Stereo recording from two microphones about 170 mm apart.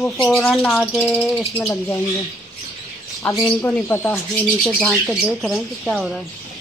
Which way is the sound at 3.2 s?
15° left (ahead or behind).